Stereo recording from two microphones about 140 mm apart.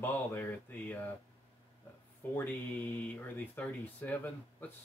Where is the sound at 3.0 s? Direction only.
10° left (ahead or behind).